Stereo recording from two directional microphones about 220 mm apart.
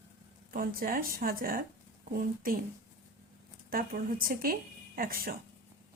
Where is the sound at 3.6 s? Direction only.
40° right (ahead or behind).